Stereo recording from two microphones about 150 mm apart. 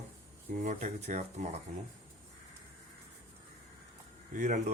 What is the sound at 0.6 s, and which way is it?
Speech, 50° right (ahead or behind).